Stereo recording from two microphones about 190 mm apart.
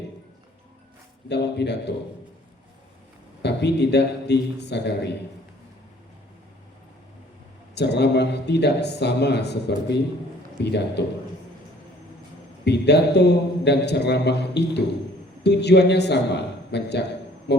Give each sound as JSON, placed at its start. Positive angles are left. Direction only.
{"t": 1.3, "sound": "a man's voice", "side_deg": 65}
{"t": 3.4, "sound": "a man's voice", "side_deg": 65}
{"t": 7.8, "sound": "a man's voice", "side_deg": 60}
{"t": 12.6, "sound": "a man's voice", "side_deg": 60}